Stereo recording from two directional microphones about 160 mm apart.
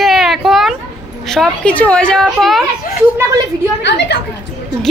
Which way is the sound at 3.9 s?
90° left.